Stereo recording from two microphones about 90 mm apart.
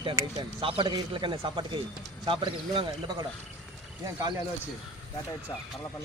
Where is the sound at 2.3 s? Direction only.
80° right.